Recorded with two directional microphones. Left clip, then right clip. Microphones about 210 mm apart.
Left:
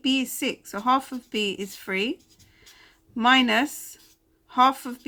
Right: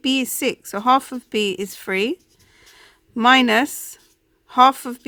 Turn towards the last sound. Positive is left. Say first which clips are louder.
# right 6 dB
turn(degrees=-50)  # may be behind; listen again after turning